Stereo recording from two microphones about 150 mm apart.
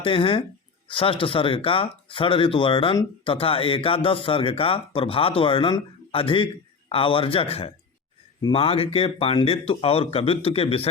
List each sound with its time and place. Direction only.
0.0 s a man's voice: 35° left (ahead or behind)